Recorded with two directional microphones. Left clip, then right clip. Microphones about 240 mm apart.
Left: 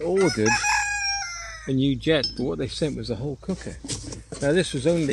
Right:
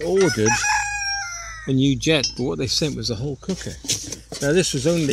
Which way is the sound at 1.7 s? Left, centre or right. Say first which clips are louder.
Right 3 dB; right.